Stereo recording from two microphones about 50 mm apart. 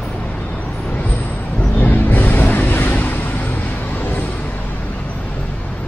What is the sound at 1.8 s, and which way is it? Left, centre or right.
Vehicle, left.